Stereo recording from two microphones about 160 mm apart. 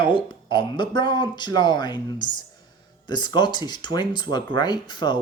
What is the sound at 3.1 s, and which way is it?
Speech, 30° left (ahead or behind).